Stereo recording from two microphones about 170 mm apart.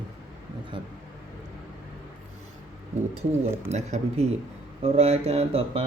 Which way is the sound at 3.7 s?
40° right (ahead or behind).